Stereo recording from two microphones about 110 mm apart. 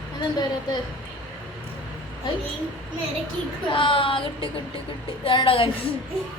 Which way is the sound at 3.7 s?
50° left (ahead or behind).